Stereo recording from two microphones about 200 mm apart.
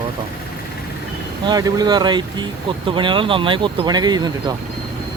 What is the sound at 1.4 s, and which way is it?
Speech, 20° right (ahead or behind).